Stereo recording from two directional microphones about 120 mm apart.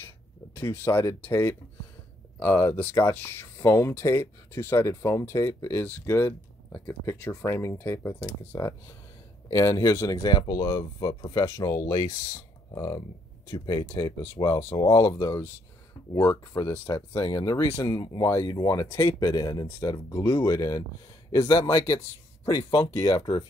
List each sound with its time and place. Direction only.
0.6 s speech: 20° left (ahead or behind)